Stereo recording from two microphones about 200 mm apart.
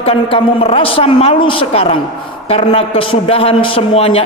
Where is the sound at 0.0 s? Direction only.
30° left (ahead or behind).